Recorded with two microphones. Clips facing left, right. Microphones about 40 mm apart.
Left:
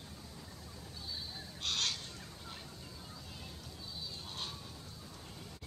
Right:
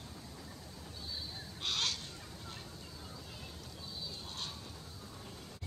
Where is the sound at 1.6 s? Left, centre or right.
Centre.